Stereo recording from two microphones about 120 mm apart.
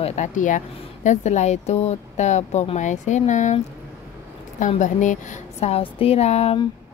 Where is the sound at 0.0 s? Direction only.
75° left (ahead or behind).